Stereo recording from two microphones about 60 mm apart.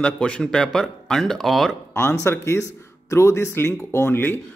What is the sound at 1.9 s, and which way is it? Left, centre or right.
Speech, left.